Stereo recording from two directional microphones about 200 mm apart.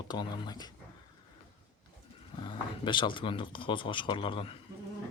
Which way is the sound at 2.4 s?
25° left (ahead or behind).